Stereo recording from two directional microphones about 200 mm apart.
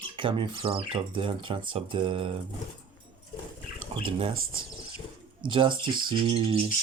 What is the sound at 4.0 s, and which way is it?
Speech, 30° right (ahead or behind).